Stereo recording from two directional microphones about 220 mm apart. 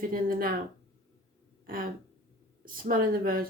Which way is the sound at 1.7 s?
40° right (ahead or behind).